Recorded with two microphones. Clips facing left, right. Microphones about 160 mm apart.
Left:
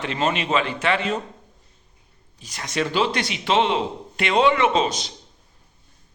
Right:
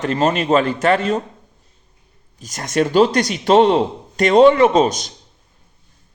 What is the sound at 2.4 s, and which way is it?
A man's voice, 45° right (ahead or behind).